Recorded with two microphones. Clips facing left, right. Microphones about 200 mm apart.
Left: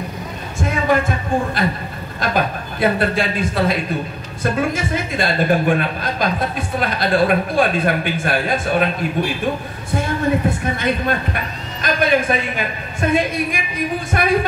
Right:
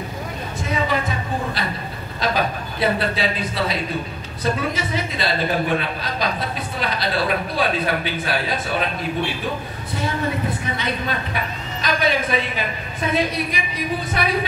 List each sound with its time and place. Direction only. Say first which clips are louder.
0.6 s music: left 5 dB; 50° left (ahead or behind)
2.1 s a woman's voice: left 2 dB; 50° left (ahead or behind)
10.6 s a woman's voice: left 5 dB; 50° left (ahead or behind)